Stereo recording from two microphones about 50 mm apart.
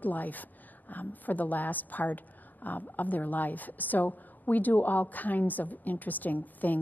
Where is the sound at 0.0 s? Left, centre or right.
Left.